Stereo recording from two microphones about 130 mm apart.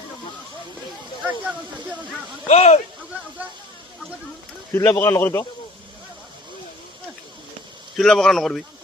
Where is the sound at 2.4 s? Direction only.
60° left (ahead or behind).